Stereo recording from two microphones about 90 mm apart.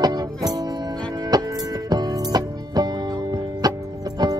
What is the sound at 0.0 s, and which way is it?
Music, 45° right (ahead or behind).